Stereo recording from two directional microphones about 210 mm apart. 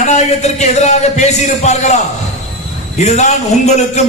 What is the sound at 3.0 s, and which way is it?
A man's voice, 35° left (ahead or behind).